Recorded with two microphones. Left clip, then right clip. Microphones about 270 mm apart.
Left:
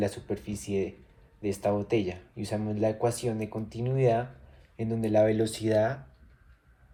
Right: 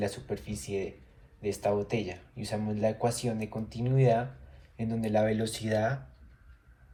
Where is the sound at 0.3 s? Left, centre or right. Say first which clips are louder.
Left 2 dB; left.